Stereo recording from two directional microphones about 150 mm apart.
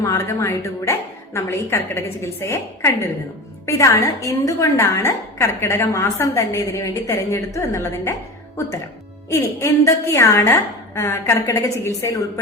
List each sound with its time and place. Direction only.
0.0 s a woman's voice: 20° left (ahead or behind)
9.3 s a woman's voice: 20° left (ahead or behind)